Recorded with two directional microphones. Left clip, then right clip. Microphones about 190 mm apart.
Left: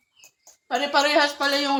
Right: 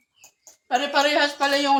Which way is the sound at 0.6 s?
20° left (ahead or behind).